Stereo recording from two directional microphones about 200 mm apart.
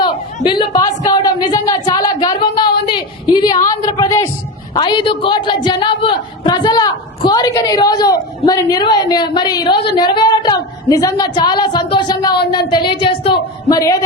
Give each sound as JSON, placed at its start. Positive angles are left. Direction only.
{"t": 0.0, "sound": "a woman's voice", "side_deg": 20}